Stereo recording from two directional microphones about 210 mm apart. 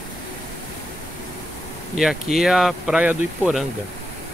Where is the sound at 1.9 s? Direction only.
Centre (ahead or behind).